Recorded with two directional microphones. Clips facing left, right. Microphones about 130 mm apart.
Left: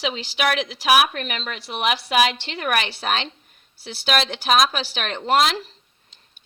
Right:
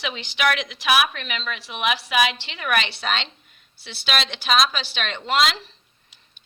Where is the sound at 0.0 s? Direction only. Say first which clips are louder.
Left 1 dB; 35° left (ahead or behind).